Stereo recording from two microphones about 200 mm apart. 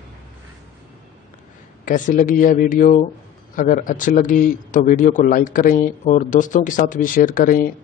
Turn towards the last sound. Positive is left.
turn(degrees=45)  # may be behind; listen again after turning